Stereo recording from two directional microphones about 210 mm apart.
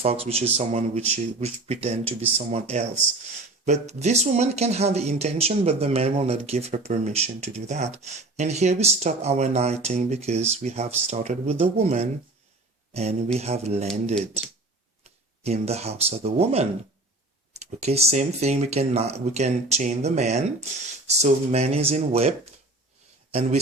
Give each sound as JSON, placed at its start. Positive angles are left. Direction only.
{"t": 0.0, "sound": "speech", "side_deg": -30}